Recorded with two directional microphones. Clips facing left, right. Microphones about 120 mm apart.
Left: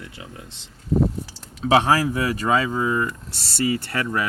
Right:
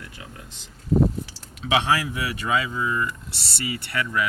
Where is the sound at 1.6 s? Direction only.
40° left (ahead or behind).